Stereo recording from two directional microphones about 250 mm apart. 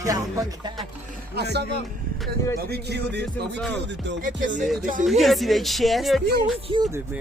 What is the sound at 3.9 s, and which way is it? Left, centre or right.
Speech, right.